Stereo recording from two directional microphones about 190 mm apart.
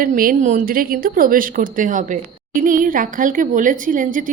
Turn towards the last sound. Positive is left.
turn(degrees=-45)  # may be behind; listen again after turning